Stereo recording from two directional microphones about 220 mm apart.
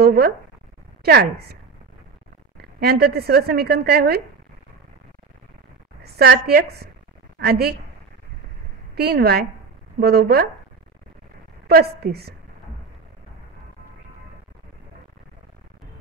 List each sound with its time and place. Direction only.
0.0 s a woman's voice: 45° right (ahead or behind)
6.0 s a woman's voice: 45° right (ahead or behind)
8.9 s a woman's voice: 45° right (ahead or behind)
11.6 s a woman's voice: 45° right (ahead or behind)